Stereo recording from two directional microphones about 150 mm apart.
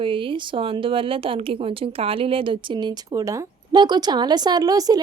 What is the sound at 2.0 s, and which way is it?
Speech, 40° right (ahead or behind).